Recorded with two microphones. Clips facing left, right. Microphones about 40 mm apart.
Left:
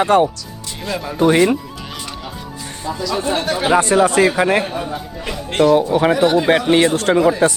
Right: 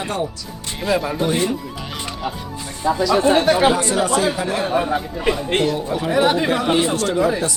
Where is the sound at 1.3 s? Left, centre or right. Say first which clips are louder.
Left 9 dB; left.